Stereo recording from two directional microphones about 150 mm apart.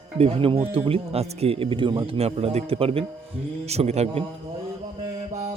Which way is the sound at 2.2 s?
45° right (ahead or behind).